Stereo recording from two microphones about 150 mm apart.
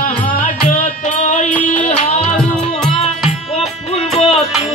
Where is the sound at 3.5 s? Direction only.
45° left (ahead or behind).